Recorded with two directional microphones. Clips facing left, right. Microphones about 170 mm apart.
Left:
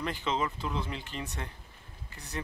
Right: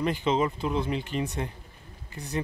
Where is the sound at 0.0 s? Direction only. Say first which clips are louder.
Right 7 dB; 15° right (ahead or behind).